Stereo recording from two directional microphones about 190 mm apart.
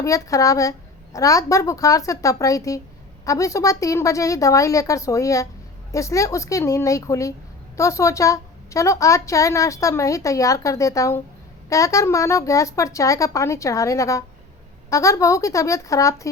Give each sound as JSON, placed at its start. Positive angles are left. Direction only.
{"t": 0.0, "sound": "a woman's voice", "side_deg": 15}